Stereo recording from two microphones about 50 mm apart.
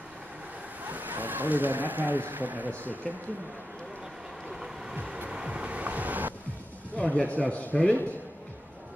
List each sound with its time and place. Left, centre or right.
0.8 s speech: right
4.9 s vehicle: right
7.0 s a man's voice: left